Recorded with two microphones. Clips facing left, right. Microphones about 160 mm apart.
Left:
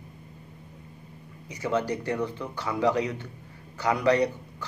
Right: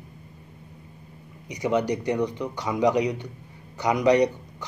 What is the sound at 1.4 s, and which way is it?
A man's voice, 15° right (ahead or behind).